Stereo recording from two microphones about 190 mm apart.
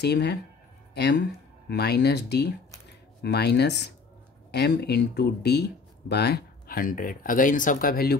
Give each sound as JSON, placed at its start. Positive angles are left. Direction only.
{"t": 0.0, "sound": "speech", "side_deg": 60}